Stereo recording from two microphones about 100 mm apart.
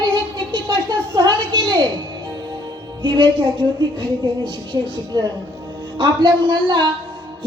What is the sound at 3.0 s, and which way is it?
A woman's voice, 55° right (ahead or behind).